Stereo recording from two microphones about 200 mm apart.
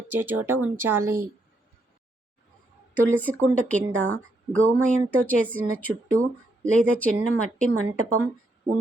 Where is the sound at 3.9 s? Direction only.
80° right.